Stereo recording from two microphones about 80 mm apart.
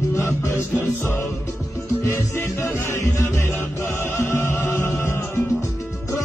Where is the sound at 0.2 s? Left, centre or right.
Left.